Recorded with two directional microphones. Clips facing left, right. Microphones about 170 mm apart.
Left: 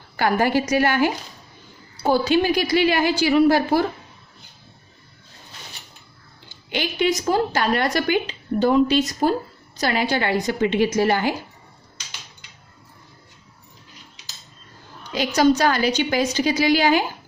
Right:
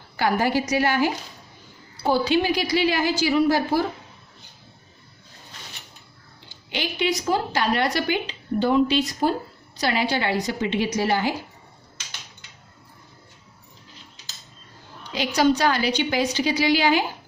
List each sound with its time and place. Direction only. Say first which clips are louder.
0.2 s a woman's voice: left 2 dB; 55° left (ahead or behind)
2.0 s a woman's voice: left 2 dB; 45° left (ahead or behind); by 3.8 s 60° left (ahead or behind)
6.7 s a woman's voice: left 3 dB; 50° left (ahead or behind)
15.1 s a woman's voice: left 3 dB; 45° left (ahead or behind)